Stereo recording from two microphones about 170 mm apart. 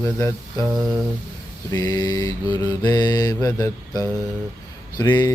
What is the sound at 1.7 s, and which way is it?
Mantra, 20° left (ahead or behind).